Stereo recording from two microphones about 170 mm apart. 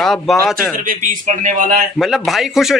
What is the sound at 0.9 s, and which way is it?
Speech, 45° right (ahead or behind).